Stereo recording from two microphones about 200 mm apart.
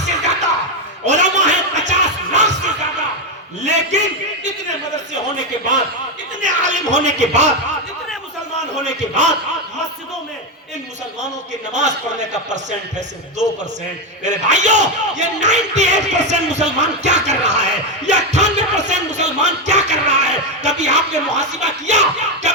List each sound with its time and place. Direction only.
1.0 s music: 35° right (ahead or behind)
3.6 s speech: 35° right (ahead or behind)
5.5 s a man's voice: 25° left (ahead or behind)
6.4 s speech: 40° right (ahead or behind)
8.7 s speech: 35° right (ahead or behind)
11.7 s speech: 35° right (ahead or behind)
14.3 s speech: 35° right (ahead or behind)